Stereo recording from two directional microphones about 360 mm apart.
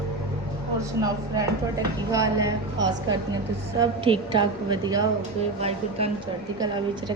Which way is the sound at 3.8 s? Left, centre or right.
Centre.